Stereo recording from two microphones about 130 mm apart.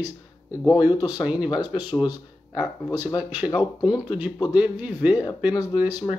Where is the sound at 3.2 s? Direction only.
10° right (ahead or behind).